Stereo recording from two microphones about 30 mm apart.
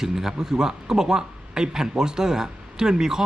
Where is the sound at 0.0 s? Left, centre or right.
Centre.